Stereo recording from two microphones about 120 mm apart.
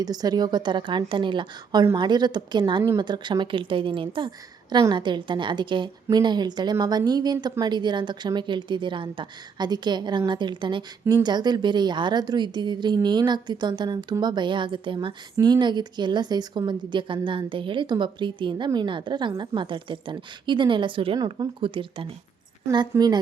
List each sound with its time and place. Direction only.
0.0 s a woman's voice: 35° right (ahead or behind)
22.7 s a woman's voice: 35° right (ahead or behind)